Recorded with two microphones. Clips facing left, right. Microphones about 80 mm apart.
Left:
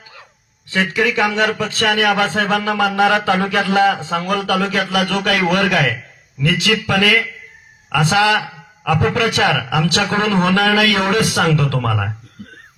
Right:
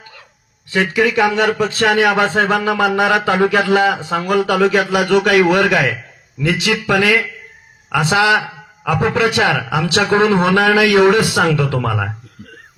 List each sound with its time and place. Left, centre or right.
0.7 s a man's voice: centre